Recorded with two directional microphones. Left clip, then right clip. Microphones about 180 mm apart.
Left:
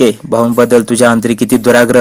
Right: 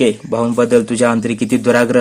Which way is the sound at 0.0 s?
35° left (ahead or behind).